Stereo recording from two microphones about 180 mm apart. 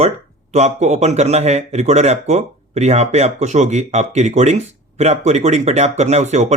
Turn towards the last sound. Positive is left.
turn(degrees=-40)  # may be behind; listen again after turning